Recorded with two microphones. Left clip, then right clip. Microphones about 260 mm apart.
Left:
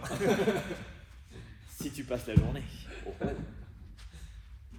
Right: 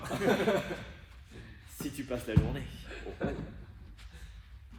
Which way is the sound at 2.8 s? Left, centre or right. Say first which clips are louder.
Even; centre.